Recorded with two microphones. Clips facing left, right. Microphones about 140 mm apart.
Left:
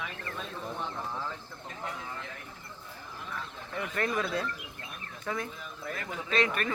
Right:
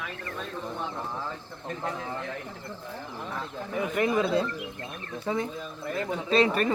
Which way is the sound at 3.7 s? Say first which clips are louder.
Right 6 dB; 15° right (ahead or behind).